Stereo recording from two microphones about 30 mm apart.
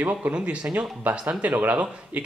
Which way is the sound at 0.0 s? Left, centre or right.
Right.